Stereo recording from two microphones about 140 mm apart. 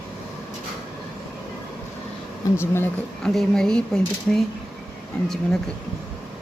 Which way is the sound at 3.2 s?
5° left (ahead or behind).